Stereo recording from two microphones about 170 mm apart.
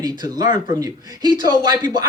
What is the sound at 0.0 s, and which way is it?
Speech, 20° right (ahead or behind).